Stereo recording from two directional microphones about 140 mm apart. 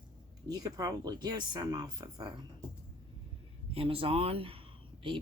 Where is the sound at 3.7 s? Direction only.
45° right (ahead or behind).